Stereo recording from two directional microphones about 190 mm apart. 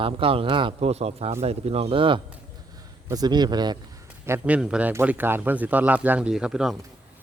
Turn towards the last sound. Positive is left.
turn(degrees=-5)  # may be behind; listen again after turning